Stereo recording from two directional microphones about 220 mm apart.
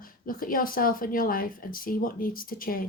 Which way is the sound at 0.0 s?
40° left (ahead or behind).